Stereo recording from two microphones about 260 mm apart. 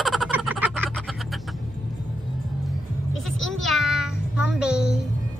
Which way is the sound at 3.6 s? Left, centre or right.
Centre.